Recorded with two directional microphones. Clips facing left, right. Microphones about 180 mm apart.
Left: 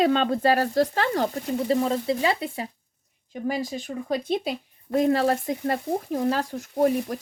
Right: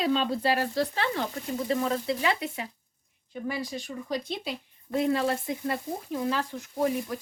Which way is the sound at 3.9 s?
55° left (ahead or behind).